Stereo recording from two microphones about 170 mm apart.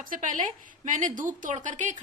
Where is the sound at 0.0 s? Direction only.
50° right (ahead or behind).